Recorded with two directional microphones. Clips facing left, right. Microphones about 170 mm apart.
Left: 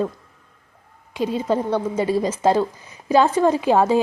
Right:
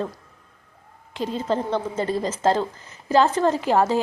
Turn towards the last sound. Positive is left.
turn(degrees=15)  # may be behind; listen again after turning